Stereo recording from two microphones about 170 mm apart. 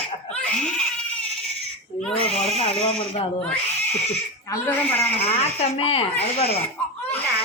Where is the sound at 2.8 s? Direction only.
35° left (ahead or behind).